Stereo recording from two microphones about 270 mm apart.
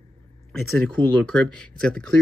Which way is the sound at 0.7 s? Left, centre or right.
Centre.